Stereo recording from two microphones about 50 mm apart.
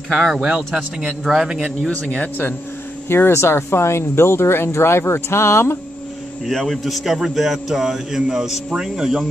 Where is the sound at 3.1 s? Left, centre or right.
Left.